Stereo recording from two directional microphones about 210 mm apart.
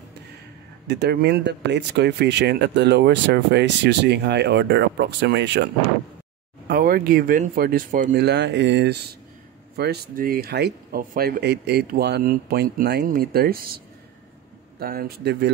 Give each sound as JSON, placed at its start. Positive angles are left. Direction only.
{"t": 0.8, "sound": "speech", "side_deg": -50}
{"t": 6.7, "sound": "speech", "side_deg": -45}
{"t": 14.8, "sound": "speech", "side_deg": -45}